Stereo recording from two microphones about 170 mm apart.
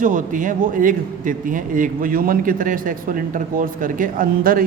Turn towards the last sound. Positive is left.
turn(degrees=-55)  # may be behind; listen again after turning